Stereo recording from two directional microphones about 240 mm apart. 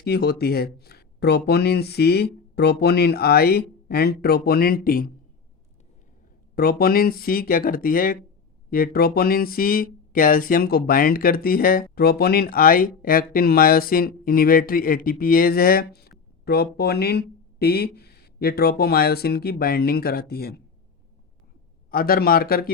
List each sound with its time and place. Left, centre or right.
0.0 s speech: left
6.6 s speech: left
21.8 s speech: left